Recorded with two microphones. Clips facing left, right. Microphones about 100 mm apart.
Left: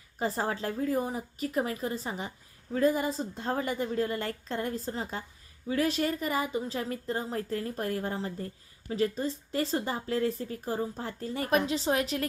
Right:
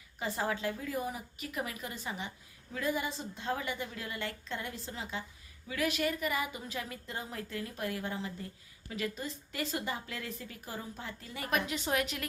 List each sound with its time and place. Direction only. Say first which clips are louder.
0.2 s a woman's voice: left 4 dB; 35° left (ahead or behind)